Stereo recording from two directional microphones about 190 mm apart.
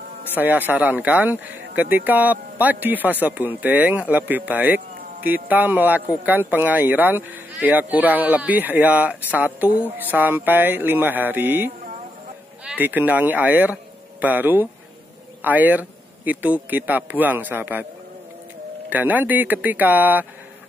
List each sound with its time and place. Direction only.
0.4 s speech: 10° right (ahead or behind)
18.9 s speech: 10° right (ahead or behind)